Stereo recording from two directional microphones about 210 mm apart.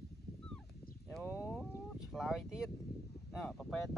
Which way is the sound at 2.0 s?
Centre (ahead or behind).